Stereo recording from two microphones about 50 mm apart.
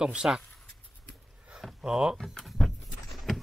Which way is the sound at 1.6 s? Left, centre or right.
Centre.